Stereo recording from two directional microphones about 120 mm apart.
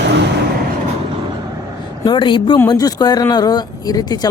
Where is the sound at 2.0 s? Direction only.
40° left (ahead or behind).